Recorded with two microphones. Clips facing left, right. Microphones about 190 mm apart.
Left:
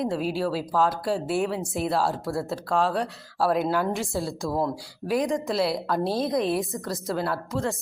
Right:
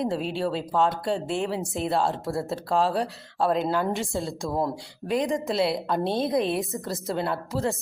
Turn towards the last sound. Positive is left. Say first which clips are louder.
# even
turn(degrees=-5)  # may be behind; listen again after turning